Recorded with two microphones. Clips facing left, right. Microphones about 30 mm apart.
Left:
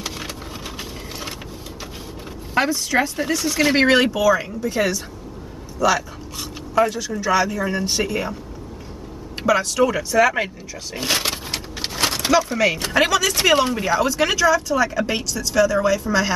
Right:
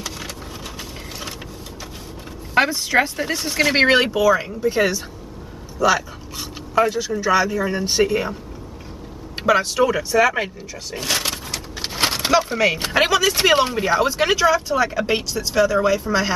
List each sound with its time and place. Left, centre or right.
2.5 s speech: centre
9.4 s speech: centre
11.0 s speech: centre
11.9 s a sound: centre
12.8 s speech: centre